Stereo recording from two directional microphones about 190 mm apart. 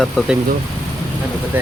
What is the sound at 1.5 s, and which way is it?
Speech, 10° right (ahead or behind).